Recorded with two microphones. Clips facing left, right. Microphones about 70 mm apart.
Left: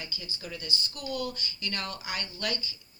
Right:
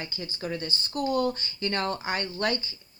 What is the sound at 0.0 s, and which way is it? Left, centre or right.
Speech, right.